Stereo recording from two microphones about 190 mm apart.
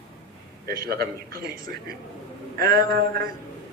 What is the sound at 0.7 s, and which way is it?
A man's voice, 50° right (ahead or behind).